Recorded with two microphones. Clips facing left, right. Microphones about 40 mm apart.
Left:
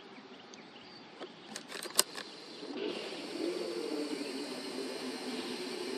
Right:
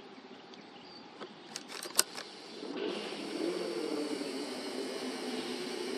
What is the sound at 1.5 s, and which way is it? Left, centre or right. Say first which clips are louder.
Camera: even; left.